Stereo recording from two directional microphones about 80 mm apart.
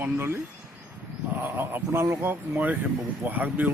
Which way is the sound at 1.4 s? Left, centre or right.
Right.